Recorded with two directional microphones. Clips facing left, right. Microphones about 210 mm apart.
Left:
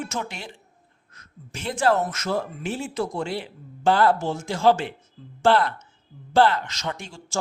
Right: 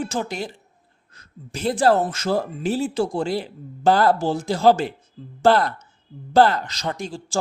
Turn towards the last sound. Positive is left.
turn(degrees=-35)  # may be behind; listen again after turning